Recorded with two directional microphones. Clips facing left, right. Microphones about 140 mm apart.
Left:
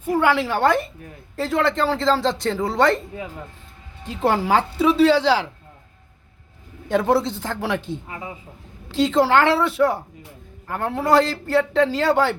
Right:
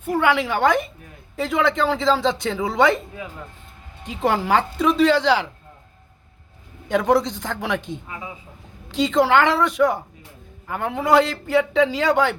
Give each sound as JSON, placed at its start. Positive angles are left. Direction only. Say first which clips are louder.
{"t": 0.0, "sound": "a woman's voice", "louder": "left 1 dB", "side_deg": 5}
{"t": 4.0, "sound": "a man's voice", "louder": "left 1 dB", "side_deg": 0}
{"t": 6.8, "sound": "a man's voice", "louder": "even", "side_deg": 5}
{"t": 8.0, "sound": "speech", "louder": "left 1 dB", "side_deg": 35}
{"t": 8.9, "sound": "a man's voice", "louder": "even", "side_deg": 0}